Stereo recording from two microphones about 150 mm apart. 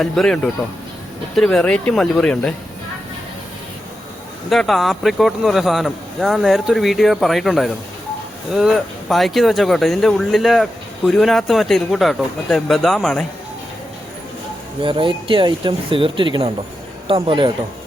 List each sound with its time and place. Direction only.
0.0 s speech: 5° left (ahead or behind)
4.4 s speech: centre (ahead or behind)
14.8 s speech: 35° right (ahead or behind)